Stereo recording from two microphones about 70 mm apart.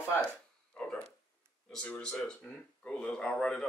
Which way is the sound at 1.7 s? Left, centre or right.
Centre.